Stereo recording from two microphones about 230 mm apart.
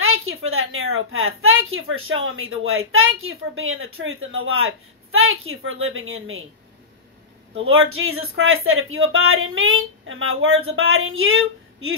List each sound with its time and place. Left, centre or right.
0.0 s a woman's voice: right
7.6 s a woman's voice: right